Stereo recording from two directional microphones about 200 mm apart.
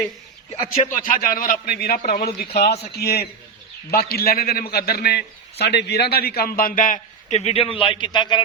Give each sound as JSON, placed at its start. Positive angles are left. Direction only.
{"t": 0.7, "sound": "a man's voice", "side_deg": 40}